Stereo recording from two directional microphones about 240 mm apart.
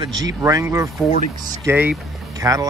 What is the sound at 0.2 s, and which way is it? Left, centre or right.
Speech, centre.